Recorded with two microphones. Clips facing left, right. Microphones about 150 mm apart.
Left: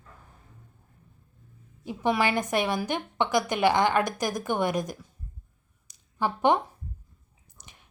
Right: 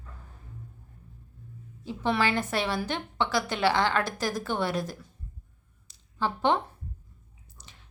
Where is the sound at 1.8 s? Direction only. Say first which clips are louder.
Left 2 dB; 15° left (ahead or behind).